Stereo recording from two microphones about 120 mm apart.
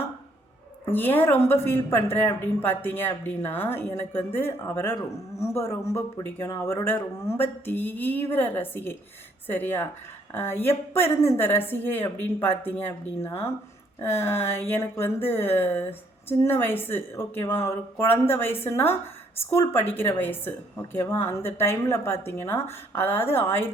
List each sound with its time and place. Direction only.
0.9 s a woman's voice: 15° left (ahead or behind)